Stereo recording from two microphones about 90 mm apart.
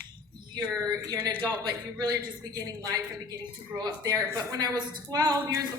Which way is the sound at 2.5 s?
50° right (ahead or behind).